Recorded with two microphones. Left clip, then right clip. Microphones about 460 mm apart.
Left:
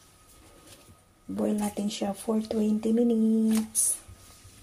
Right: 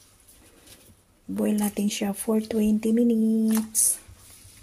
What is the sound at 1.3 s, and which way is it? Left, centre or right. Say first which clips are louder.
Speech: right 3 dB; right.